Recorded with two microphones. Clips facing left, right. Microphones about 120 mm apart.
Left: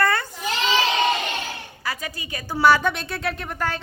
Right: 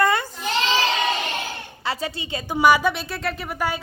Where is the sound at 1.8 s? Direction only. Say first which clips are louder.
Right 4 dB; 25° right (ahead or behind).